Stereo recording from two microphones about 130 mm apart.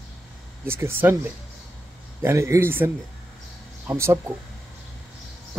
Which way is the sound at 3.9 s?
20° right (ahead or behind).